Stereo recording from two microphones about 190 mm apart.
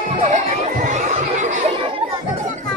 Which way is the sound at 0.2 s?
35° right (ahead or behind).